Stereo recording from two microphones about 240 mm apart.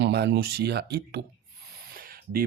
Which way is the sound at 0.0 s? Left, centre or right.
Right.